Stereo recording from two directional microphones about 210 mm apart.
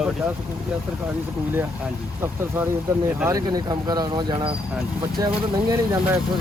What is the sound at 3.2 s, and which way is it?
Speech, 15° right (ahead or behind).